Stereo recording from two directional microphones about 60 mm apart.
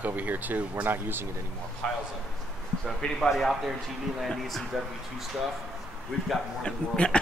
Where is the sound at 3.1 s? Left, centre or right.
Centre.